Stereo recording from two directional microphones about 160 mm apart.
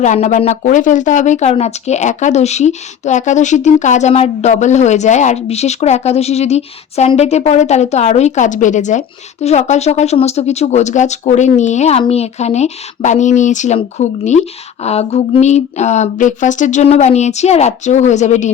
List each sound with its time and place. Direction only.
0.0 s speech: 50° left (ahead or behind)